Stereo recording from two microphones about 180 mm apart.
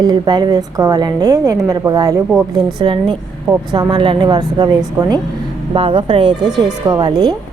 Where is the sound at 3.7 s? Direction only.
25° right (ahead or behind).